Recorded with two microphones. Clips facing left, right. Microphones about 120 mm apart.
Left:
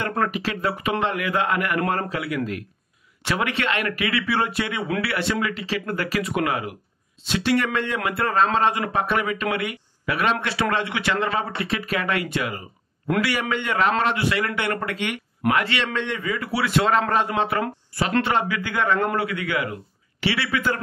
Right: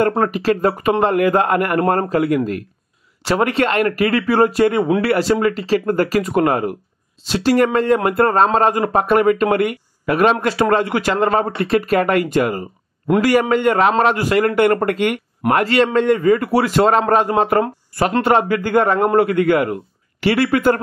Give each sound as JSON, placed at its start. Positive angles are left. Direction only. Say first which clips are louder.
{"t": 0.3, "sound": "speech", "louder": "right 9 dB", "side_deg": -40}